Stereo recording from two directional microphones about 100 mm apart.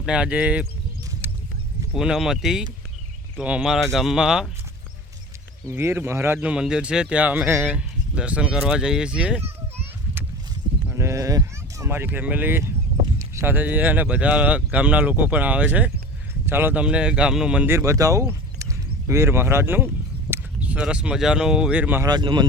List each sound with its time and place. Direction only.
0.0 s speech: 10° right (ahead or behind)
1.2 s clip-clop: 25° right (ahead or behind)
1.9 s speech: 5° right (ahead or behind)
3.6 s speech: centre (ahead or behind)
5.7 s a man's voice: 25° right (ahead or behind)
6.5 s speech: 5° right (ahead or behind)
7.8 s speech: 10° right (ahead or behind)
10.9 s a man's voice: 30° right (ahead or behind)
16.8 s speech: 10° right (ahead or behind)
17.7 s speech: 30° right (ahead or behind)
22.0 s speech: 50° right (ahead or behind)